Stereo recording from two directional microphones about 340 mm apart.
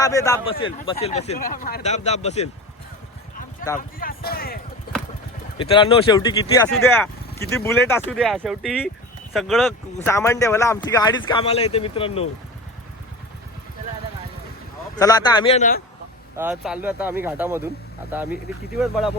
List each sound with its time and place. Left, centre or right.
0.0 s speech: centre
3.8 s speech: left
5.5 s speech: centre
14.9 s speech: centre
16.3 s speech: centre